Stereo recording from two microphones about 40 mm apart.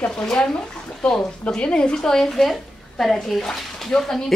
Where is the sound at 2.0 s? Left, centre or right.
Centre.